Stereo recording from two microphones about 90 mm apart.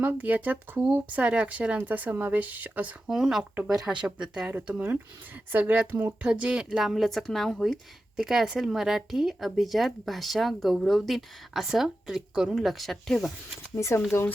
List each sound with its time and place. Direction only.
0.0 s speech: 20° right (ahead or behind)
3.1 s speech: 5° right (ahead or behind)
3.5 s speech: 15° right (ahead or behind); by 13.3 s centre (ahead or behind)
13.7 s speech: 30° left (ahead or behind)